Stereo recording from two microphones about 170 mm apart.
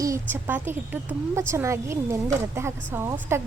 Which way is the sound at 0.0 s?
15° right (ahead or behind).